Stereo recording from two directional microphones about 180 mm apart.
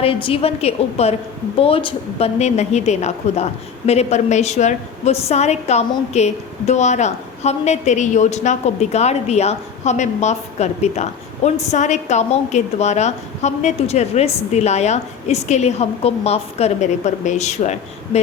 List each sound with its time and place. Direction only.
0.0 s a woman's voice: 30° left (ahead or behind)